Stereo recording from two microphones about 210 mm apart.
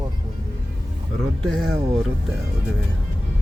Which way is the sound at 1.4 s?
Centre (ahead or behind).